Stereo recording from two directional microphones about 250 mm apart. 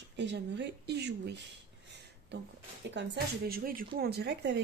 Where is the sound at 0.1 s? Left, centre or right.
Right.